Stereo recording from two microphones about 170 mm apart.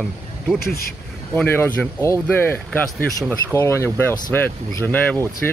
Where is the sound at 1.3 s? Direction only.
10° left (ahead or behind).